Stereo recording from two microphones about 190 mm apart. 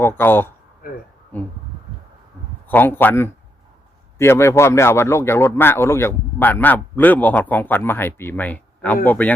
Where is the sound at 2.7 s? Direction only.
10° left (ahead or behind).